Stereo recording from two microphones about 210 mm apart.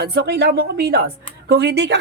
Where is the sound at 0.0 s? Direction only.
50° right (ahead or behind).